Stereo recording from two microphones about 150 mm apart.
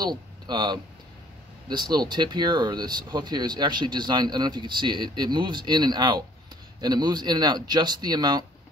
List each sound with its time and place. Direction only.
0.0 s speech: 30° right (ahead or behind)